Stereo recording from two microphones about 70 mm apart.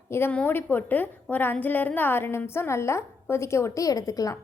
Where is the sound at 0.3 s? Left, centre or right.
Left.